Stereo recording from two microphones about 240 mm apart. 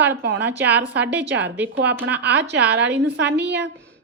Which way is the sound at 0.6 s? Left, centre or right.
Centre.